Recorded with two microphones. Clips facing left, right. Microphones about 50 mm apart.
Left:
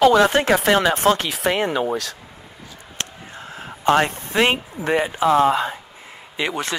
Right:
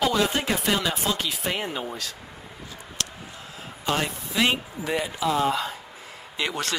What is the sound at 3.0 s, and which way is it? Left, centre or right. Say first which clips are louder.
Speech: left 3 dB; left.